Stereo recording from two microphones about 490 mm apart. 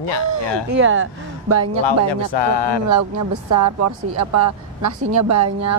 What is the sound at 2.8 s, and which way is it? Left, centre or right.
Speech, right.